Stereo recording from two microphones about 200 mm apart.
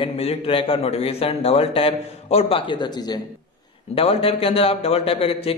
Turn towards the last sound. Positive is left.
turn(degrees=30)  # may be behind; listen again after turning